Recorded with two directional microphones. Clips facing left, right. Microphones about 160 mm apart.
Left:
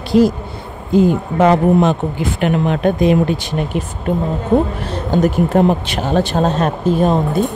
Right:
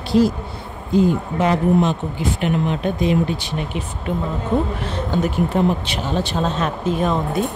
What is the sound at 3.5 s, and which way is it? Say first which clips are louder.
Speech: left 5 dB; 45° left (ahead or behind).